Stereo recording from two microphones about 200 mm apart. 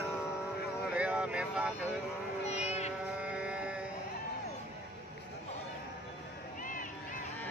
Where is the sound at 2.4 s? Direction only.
35° left (ahead or behind).